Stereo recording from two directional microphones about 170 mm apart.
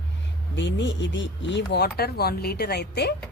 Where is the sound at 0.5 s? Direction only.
90° left.